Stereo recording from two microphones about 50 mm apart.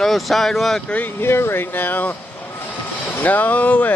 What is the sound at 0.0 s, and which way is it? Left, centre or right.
Speech, centre.